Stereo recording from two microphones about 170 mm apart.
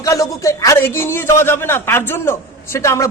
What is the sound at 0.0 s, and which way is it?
A man's voice, 20° left (ahead or behind).